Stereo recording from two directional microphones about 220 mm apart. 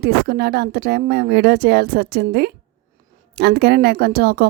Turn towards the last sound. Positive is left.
turn(degrees=-45)  # may be behind; listen again after turning